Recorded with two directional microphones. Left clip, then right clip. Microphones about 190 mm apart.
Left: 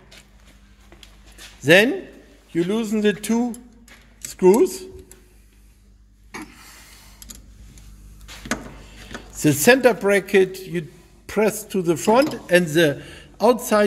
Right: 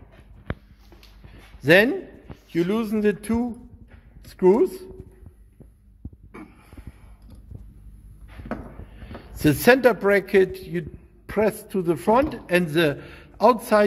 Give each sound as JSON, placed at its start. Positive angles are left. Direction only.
{"t": 1.6, "sound": "speech", "side_deg": 10}
{"t": 9.1, "sound": "speech", "side_deg": 5}